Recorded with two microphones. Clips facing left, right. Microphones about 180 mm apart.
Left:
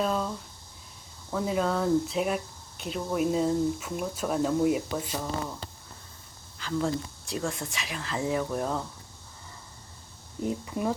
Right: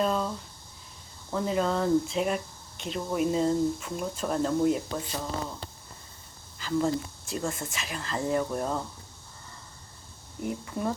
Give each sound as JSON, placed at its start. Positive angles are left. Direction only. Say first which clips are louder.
{"t": 0.0, "sound": "a sound", "louder": "right 1 dB", "side_deg": 0}
{"t": 1.3, "sound": "speech", "louder": "even", "side_deg": 0}
{"t": 6.6, "sound": "speech", "louder": "right 2 dB", "side_deg": 0}
{"t": 10.4, "sound": "speech", "louder": "left 2 dB", "side_deg": 20}